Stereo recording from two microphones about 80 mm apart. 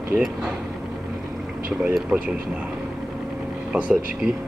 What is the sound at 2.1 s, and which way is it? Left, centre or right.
Speech, centre.